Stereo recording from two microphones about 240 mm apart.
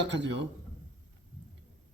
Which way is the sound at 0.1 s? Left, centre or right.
Right.